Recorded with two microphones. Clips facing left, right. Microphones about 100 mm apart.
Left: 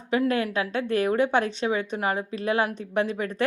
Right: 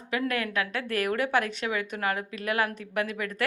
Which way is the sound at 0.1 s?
25° left (ahead or behind).